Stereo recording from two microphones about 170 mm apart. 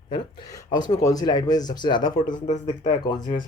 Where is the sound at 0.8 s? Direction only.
20° left (ahead or behind).